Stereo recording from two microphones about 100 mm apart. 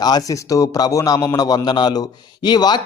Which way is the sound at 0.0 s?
40° left (ahead or behind).